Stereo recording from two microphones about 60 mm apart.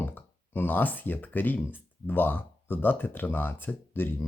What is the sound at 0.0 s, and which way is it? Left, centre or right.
Speech, left.